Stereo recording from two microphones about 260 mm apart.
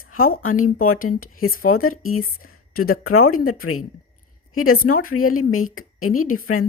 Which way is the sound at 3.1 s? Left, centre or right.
Left.